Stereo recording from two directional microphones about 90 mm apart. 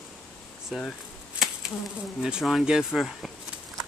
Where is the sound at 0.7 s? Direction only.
Centre (ahead or behind).